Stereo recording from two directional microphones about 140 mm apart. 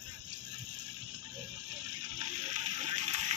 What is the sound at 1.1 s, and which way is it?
Music, 60° right (ahead or behind).